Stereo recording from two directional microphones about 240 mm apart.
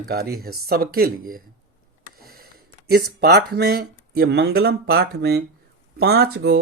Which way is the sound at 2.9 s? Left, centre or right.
Right.